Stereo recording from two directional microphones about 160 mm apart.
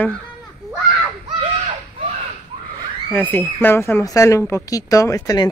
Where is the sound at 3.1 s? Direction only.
10° left (ahead or behind).